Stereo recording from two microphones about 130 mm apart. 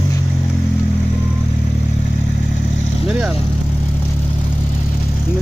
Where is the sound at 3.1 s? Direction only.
5° right (ahead or behind).